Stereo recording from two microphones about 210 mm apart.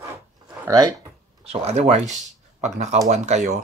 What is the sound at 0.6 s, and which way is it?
Speech, 15° right (ahead or behind).